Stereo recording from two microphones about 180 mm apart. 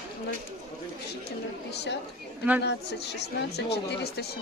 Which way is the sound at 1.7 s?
70° left (ahead or behind).